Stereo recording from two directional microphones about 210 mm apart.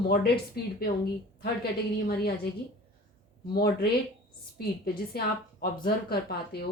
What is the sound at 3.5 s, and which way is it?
A woman's voice, 45° left (ahead or behind).